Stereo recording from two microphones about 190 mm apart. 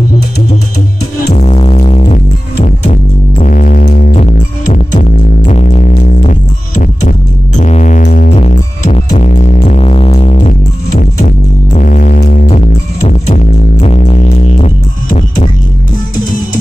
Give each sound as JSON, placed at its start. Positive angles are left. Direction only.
{"t": 1.3, "sound": "music", "side_deg": 35}
{"t": 4.1, "sound": "music", "side_deg": 40}
{"t": 12.4, "sound": "music", "side_deg": 35}